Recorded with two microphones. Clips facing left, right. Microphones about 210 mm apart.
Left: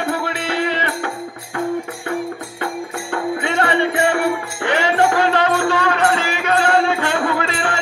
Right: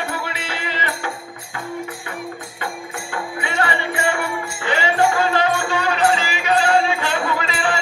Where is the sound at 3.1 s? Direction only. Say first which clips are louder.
Left 7 dB; 60° left (ahead or behind).